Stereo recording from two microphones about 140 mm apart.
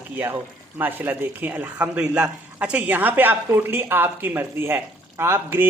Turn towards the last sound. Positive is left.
turn(degrees=-15)  # may be behind; listen again after turning